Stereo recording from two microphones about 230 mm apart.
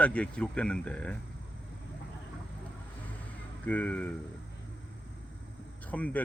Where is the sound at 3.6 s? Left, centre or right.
Centre.